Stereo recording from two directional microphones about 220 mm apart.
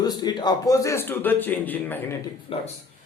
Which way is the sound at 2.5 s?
25° left (ahead or behind).